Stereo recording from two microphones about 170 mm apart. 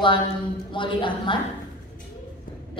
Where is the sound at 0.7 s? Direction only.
30° left (ahead or behind).